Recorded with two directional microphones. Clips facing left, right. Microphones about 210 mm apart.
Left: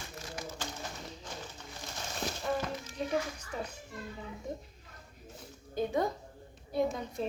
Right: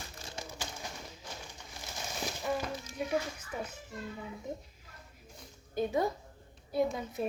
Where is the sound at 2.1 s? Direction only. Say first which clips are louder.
Left 1 dB; 10° right (ahead or behind).